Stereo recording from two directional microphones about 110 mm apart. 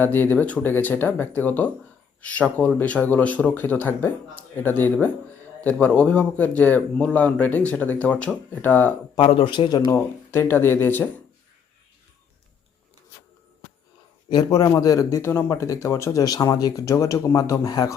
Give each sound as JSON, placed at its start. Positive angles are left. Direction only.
{"t": 0.0, "sound": "speech", "side_deg": 20}
{"t": 9.2, "sound": "speech", "side_deg": 60}
{"t": 9.5, "sound": "speech", "side_deg": 40}
{"t": 10.3, "sound": "speech", "side_deg": 20}
{"t": 14.3, "sound": "speech", "side_deg": 40}